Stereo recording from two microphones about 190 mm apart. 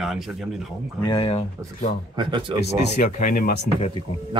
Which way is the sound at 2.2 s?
25° right (ahead or behind).